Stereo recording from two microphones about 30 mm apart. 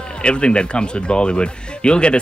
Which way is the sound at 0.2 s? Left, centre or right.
Left.